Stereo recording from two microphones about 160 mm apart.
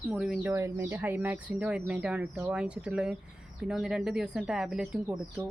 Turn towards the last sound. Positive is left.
turn(degrees=-5)  # may be behind; listen again after turning